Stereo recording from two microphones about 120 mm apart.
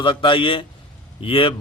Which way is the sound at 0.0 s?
45° left (ahead or behind).